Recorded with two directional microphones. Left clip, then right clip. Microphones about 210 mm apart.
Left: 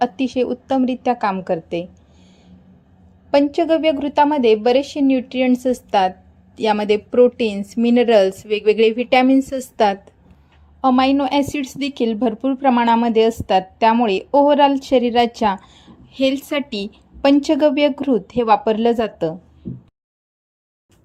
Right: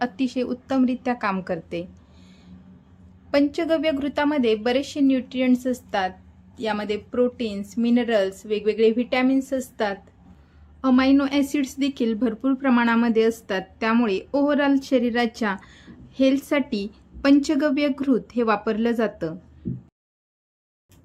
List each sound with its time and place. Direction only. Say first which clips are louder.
0.0 s a woman's voice: left 7 dB; 10° left (ahead or behind); by 10.0 s 30° left (ahead or behind)
10.8 s a woman's voice: left 4 dB; 20° left (ahead or behind)